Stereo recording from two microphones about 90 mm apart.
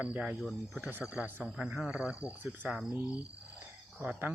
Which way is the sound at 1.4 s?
5° right (ahead or behind).